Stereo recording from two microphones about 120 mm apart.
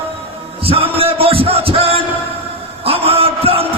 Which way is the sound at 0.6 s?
50° right (ahead or behind).